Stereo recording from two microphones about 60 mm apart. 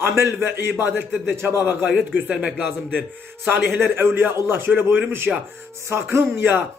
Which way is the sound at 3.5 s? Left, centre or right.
Right.